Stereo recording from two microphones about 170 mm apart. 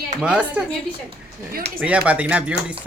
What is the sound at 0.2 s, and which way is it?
Speech, 5° right (ahead or behind).